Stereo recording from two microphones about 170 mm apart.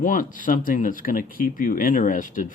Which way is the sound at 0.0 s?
50° left (ahead or behind).